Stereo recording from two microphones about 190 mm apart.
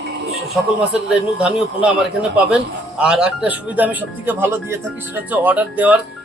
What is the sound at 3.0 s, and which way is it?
A man's voice, 5° right (ahead or behind).